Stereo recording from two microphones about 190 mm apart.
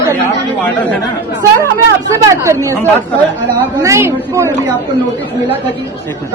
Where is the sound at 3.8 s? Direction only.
15° right (ahead or behind).